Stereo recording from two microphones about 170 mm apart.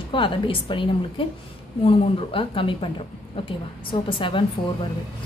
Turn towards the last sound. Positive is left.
turn(degrees=30)  # may be behind; listen again after turning